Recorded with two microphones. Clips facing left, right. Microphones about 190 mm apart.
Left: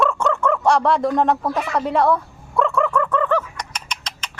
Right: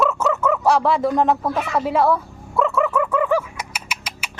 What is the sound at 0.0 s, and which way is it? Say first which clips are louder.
Chicken: even; 5° right (ahead or behind).